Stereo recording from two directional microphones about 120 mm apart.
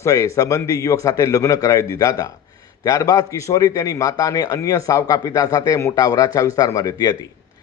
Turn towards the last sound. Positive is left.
turn(degrees=35)  # may be behind; listen again after turning